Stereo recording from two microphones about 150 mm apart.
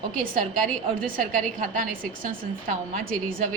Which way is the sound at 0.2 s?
65° right (ahead or behind).